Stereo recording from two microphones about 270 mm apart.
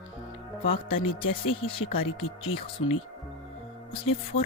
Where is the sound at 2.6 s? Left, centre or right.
Centre.